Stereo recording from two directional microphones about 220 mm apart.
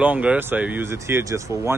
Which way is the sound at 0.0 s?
5° right (ahead or behind).